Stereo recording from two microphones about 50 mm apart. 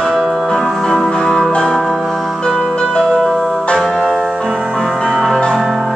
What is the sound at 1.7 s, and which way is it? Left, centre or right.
Music, centre.